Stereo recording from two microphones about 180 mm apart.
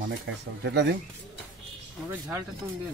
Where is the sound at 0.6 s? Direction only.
75° right (ahead or behind).